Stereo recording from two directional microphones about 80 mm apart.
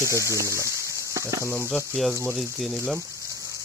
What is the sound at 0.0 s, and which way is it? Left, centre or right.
Speech, left.